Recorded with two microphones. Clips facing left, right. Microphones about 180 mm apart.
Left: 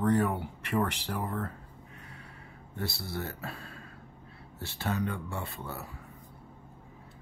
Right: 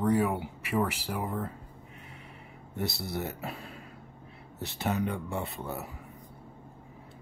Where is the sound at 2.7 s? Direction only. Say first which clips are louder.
Right 3 dB; 20° right (ahead or behind).